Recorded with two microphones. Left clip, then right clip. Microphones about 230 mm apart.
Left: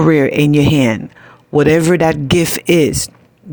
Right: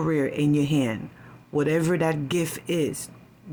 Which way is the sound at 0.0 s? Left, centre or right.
Left.